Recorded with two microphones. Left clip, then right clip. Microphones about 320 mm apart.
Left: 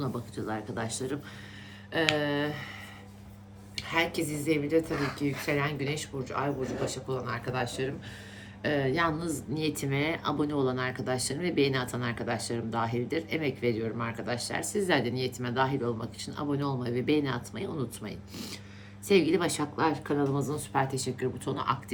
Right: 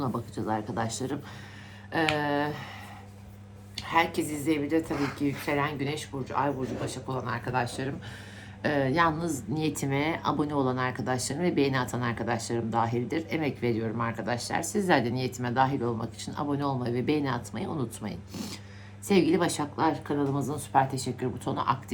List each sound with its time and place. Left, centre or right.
0.0 s speech: centre
3.8 s speech: right